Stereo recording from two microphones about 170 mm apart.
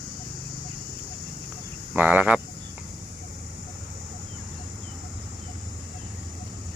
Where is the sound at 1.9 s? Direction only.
10° right (ahead or behind).